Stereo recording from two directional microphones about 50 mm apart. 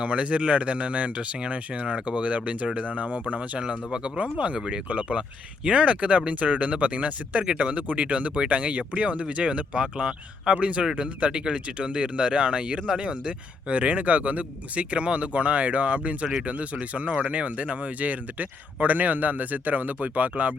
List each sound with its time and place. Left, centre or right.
0.0 s speech: right
3.6 s speech: centre